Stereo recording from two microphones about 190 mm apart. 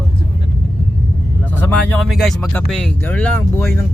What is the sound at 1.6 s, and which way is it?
Speech, 10° left (ahead or behind).